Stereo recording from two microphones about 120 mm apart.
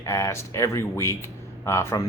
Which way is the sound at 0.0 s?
25° left (ahead or behind).